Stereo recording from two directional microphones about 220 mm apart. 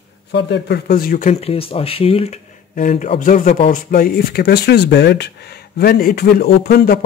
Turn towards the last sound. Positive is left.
turn(degrees=45)  # may be behind; listen again after turning